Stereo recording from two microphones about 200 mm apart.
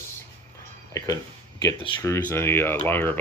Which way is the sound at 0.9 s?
15° left (ahead or behind).